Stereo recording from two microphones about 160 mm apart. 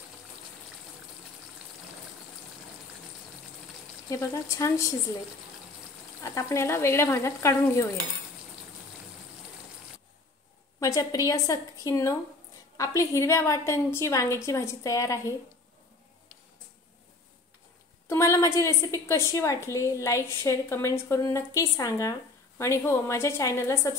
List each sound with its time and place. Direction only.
4.1 s a woman's voice: 20° left (ahead or behind)
6.2 s speech: 20° left (ahead or behind)
10.8 s a woman's voice: 20° left (ahead or behind)
18.0 s a woman's voice: 15° left (ahead or behind)